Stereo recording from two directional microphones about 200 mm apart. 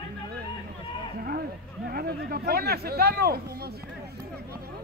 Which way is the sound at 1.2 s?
50° right (ahead or behind).